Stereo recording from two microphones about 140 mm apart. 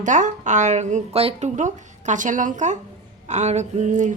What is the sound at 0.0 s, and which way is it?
A woman's voice, 60° right (ahead or behind).